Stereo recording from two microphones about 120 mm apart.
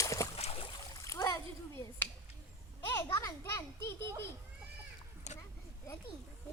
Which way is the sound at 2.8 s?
25° left (ahead or behind).